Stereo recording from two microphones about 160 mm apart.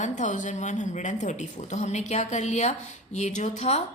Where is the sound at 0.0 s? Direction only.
50° left (ahead or behind).